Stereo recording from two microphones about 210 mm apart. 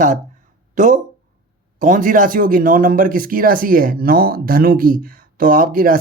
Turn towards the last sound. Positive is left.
turn(degrees=-40)  # may be behind; listen again after turning